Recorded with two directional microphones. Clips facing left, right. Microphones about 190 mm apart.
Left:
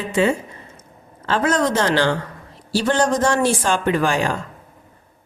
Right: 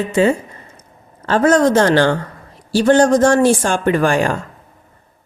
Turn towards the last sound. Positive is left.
turn(degrees=-50)  # may be behind; listen again after turning